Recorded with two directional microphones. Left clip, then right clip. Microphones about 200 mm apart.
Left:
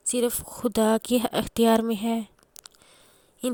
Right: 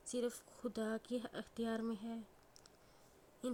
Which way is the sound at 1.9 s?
50° left (ahead or behind).